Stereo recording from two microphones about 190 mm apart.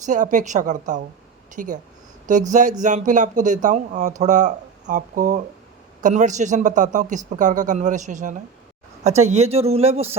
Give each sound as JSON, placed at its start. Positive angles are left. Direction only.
{"t": 0.0, "sound": "speech", "side_deg": -40}